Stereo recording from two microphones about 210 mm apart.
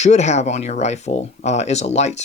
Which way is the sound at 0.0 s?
35° left (ahead or behind).